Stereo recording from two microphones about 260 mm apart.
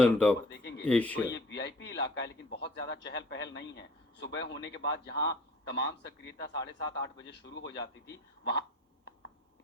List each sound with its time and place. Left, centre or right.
0.0 s speech: centre
0.5 s speech: left
0.9 s speech: centre
1.3 s a man's voice: left